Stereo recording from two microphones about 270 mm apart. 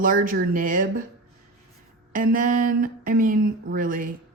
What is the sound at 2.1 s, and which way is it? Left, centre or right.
A woman's voice, right.